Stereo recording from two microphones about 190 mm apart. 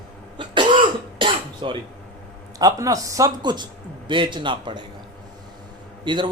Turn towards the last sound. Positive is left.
turn(degrees=-25)  # may be behind; listen again after turning